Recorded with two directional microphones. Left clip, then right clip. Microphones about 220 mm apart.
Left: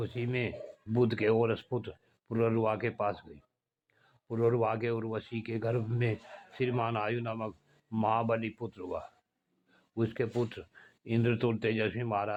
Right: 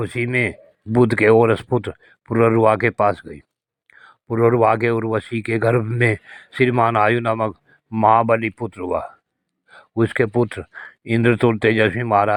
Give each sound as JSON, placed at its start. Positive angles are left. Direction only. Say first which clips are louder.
{"t": 0.0, "sound": "speech", "louder": "right 14 dB", "side_deg": -35}